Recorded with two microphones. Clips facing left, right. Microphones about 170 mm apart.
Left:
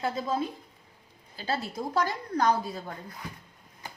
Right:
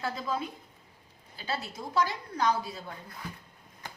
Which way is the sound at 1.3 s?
40° left (ahead or behind).